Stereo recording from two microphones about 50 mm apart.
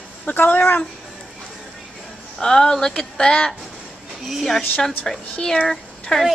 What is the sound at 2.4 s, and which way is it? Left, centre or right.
Speech, centre.